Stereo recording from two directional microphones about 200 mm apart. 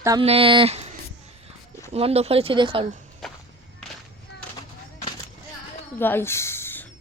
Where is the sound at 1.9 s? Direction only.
30° right (ahead or behind).